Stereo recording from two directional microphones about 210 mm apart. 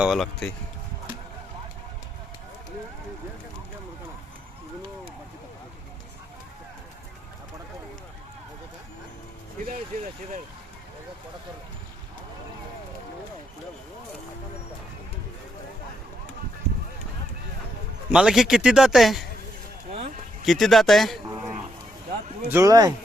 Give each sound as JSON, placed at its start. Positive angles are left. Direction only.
{"t": 0.0, "sound": "a man's voice", "side_deg": 0}
{"t": 18.1, "sound": "a man's voice", "side_deg": -5}
{"t": 19.9, "sound": "a sound", "side_deg": -35}
{"t": 20.4, "sound": "a man's voice", "side_deg": 0}
{"t": 22.4, "sound": "a man's voice", "side_deg": -15}